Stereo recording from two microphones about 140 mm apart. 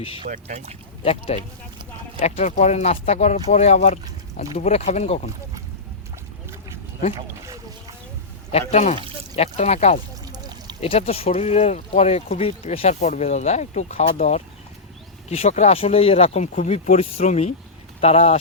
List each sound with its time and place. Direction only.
0.3 s speech: 55° right (ahead or behind)
1.0 s speech: 45° left (ahead or behind)
7.2 s boat: 25° right (ahead or behind)
8.5 s speech: 55° left (ahead or behind)
10.2 s a sound: 30° right (ahead or behind)
10.8 s speech: 45° left (ahead or behind)